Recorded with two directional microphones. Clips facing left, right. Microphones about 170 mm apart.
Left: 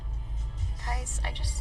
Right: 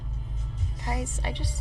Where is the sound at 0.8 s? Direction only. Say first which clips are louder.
Right 5 dB; 20° right (ahead or behind).